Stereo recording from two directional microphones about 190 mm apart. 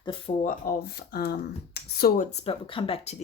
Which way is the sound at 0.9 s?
55° left (ahead or behind).